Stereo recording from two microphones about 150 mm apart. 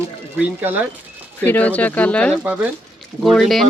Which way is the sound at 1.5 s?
10° left (ahead or behind).